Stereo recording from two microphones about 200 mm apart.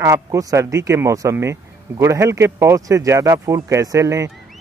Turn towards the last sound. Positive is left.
turn(degrees=-15)  # may be behind; listen again after turning